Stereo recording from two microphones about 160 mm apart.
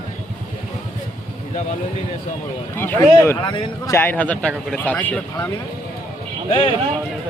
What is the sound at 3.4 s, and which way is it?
Speech, 30° left (ahead or behind).